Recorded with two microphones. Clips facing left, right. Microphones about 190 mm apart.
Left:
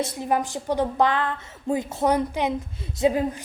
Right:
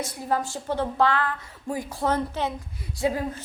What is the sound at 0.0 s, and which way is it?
A woman's voice, 25° left (ahead or behind).